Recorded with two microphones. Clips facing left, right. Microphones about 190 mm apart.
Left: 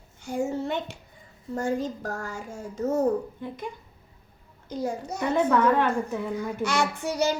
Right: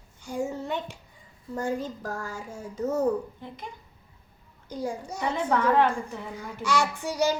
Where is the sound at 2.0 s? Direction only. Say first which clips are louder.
Left 1 dB; 65° left (ahead or behind).